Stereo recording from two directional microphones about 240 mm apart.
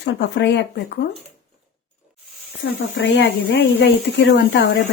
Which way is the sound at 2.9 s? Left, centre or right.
Left.